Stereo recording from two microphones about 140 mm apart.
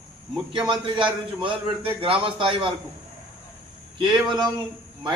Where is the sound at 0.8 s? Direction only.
35° right (ahead or behind).